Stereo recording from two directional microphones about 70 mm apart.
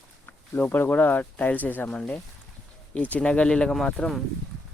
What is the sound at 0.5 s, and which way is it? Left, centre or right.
Speech, left.